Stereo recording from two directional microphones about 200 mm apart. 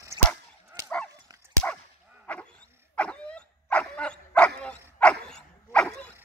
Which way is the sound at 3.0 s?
5° left (ahead or behind).